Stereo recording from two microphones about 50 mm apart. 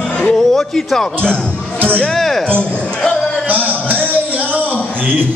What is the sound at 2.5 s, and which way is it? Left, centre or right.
Speech, left.